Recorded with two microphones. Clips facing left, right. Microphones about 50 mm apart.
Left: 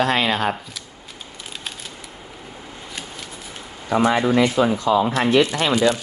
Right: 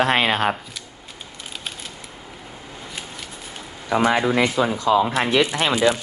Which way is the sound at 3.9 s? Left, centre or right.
Right.